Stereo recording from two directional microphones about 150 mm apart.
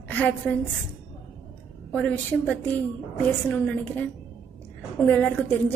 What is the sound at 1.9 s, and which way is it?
A woman's voice, 10° left (ahead or behind).